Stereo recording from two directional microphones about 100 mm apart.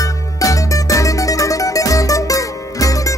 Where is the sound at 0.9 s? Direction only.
35° left (ahead or behind).